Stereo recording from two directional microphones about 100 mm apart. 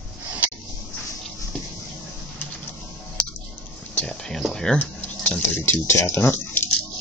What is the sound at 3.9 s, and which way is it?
Speech, 10° left (ahead or behind).